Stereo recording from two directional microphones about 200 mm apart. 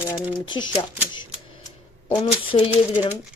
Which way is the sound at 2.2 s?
30° left (ahead or behind).